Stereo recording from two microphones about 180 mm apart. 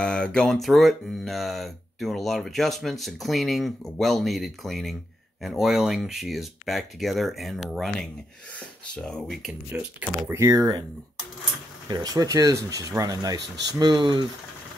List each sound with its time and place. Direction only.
0.0 s speech: 5° left (ahead or behind)
9.7 s speech: 10° right (ahead or behind)
11.9 s speech: 20° right (ahead or behind)